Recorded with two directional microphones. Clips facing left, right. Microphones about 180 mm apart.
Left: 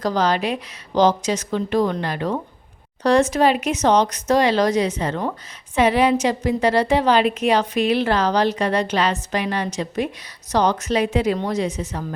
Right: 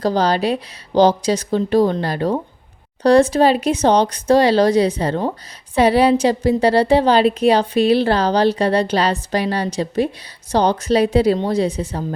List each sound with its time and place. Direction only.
0.0 s a woman's voice: 30° right (ahead or behind)